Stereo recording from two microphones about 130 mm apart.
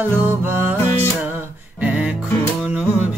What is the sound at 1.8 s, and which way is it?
Music, 10° right (ahead or behind).